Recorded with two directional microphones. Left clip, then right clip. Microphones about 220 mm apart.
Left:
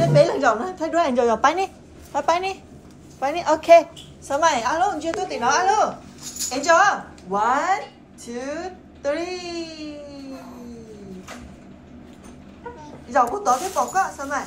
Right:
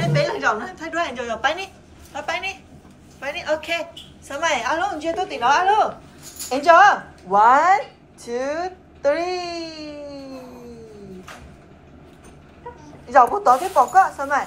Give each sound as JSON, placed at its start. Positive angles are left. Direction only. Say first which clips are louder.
{"t": 0.0, "sound": "a woman's voice", "louder": "left 4 dB", "side_deg": 25}
{"t": 13.0, "sound": "speech", "louder": "right 5 dB", "side_deg": 5}